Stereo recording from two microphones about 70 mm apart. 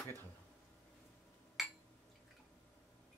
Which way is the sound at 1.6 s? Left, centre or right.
Centre.